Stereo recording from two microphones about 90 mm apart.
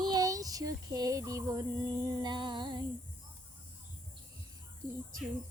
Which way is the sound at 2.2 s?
55° right (ahead or behind).